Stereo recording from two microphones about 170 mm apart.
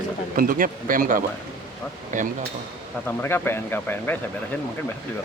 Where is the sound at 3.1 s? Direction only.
10° left (ahead or behind).